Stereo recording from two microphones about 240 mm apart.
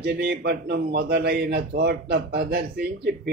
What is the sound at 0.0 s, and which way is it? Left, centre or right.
A man's voice, right.